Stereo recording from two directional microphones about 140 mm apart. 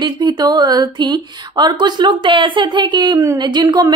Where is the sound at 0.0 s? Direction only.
30° right (ahead or behind).